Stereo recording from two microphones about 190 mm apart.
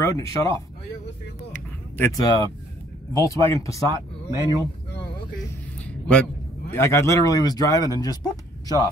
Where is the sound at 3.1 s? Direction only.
15° left (ahead or behind).